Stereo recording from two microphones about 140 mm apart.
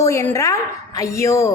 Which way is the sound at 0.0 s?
20° left (ahead or behind).